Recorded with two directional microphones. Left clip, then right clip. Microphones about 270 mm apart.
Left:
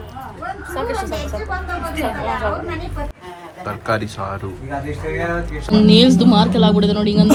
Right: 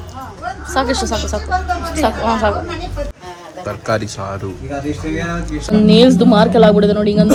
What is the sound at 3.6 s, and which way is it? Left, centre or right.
Speech, centre.